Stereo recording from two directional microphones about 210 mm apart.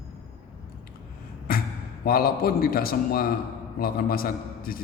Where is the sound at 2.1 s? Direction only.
45° left (ahead or behind).